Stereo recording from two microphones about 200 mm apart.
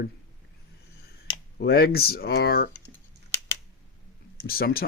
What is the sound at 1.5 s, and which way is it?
Speech, 50° left (ahead or behind).